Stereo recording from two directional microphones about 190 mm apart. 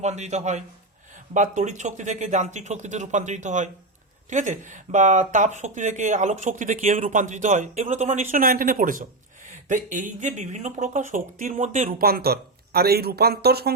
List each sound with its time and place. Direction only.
0.0 s speech: 35° right (ahead or behind); by 13.7 s 55° right (ahead or behind)